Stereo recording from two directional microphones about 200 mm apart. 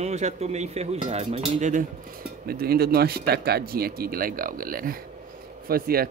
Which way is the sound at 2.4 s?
50° right (ahead or behind).